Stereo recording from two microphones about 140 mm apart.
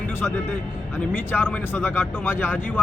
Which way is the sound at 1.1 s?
15° left (ahead or behind).